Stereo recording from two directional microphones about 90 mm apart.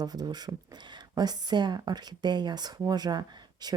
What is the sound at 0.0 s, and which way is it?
Speech, 50° right (ahead or behind).